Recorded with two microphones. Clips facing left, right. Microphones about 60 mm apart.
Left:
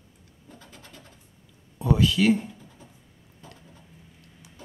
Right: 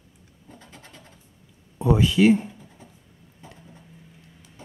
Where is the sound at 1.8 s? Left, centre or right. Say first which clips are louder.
Right 4 dB; right.